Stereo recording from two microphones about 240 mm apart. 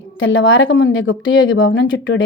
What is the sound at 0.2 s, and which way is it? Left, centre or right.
Speech, left.